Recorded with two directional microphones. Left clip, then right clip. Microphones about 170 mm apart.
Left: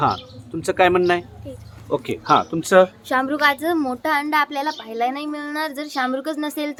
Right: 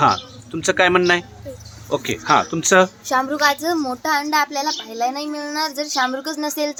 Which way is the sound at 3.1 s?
40° left (ahead or behind).